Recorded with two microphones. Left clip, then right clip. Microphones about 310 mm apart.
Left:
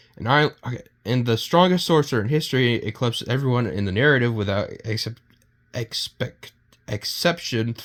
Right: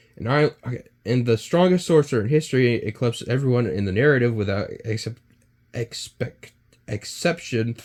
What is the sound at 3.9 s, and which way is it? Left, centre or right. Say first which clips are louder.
Speech: even; left.